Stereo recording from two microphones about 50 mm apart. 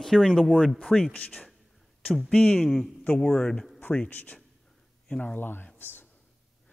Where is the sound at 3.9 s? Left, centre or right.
Left.